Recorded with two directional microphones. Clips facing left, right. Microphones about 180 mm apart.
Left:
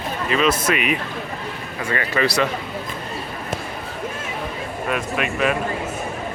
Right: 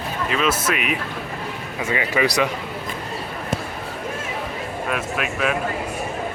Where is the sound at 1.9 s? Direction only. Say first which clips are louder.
Even; 15° right (ahead or behind).